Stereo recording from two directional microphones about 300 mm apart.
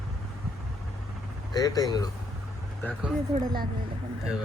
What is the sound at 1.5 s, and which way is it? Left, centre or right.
Speech, centre.